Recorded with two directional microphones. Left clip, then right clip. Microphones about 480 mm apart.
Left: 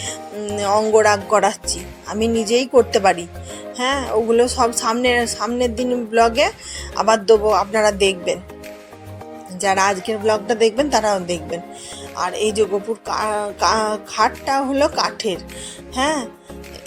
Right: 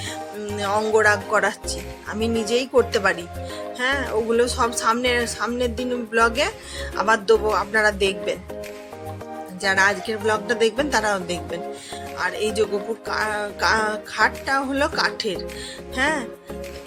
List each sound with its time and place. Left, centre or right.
0.5 s a woman's voice: centre
9.6 s a woman's voice: centre